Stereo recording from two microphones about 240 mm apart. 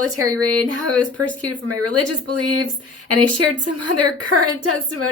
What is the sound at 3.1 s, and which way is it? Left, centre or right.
A woman's voice, right.